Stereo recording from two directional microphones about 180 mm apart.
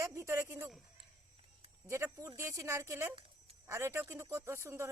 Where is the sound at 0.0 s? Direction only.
15° right (ahead or behind).